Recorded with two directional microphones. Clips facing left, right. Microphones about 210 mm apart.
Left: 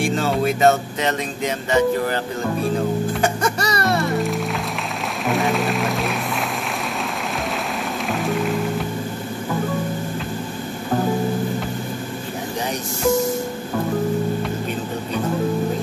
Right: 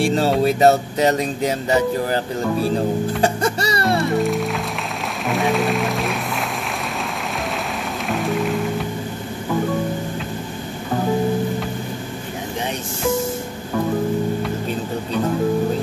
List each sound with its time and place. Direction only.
0.0 s music: 35° right (ahead or behind)
3.2 s music: 30° right (ahead or behind)
4.0 s music: centre (ahead or behind)
8.1 s music: centre (ahead or behind)